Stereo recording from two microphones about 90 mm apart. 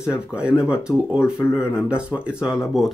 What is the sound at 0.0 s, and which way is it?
Speech, 10° right (ahead or behind).